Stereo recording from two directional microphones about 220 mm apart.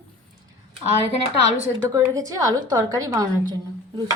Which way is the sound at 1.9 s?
15° right (ahead or behind).